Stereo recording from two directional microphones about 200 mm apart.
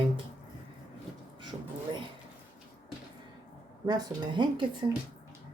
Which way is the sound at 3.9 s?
20° right (ahead or behind).